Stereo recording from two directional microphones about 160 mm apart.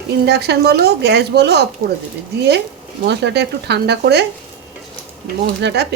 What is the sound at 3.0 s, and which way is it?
A woman's voice, 90° right.